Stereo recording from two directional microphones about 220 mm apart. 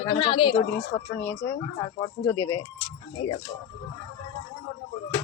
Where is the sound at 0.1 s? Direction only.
20° left (ahead or behind).